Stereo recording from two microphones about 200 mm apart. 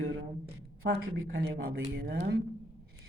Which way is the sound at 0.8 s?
85° right.